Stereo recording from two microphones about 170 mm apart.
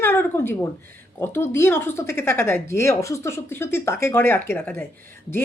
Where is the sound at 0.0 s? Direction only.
15° left (ahead or behind).